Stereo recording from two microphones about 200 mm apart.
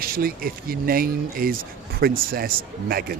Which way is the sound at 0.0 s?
50° right (ahead or behind).